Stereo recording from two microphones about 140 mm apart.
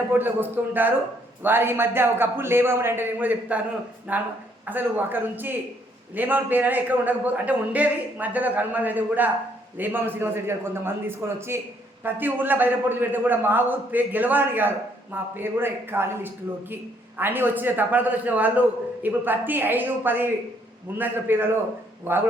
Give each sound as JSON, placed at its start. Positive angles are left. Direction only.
{"t": 0.1, "sound": "a man's voice", "side_deg": -15}